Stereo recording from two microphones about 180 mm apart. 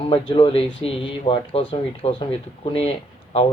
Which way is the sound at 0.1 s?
30° left (ahead or behind).